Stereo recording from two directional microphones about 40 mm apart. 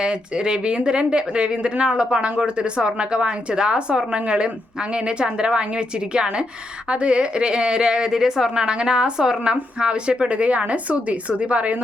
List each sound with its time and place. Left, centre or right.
0.0 s speech: right